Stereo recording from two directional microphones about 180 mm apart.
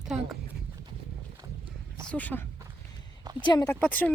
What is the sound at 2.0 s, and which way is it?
Speech, 5° left (ahead or behind).